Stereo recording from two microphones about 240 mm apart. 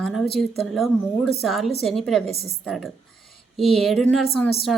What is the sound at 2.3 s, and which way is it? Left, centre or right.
Speech, left.